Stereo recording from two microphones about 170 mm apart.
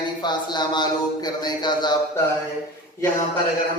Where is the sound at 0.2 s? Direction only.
25° left (ahead or behind).